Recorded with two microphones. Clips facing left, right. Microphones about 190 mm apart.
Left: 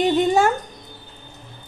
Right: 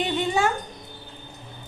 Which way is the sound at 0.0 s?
45° left (ahead or behind).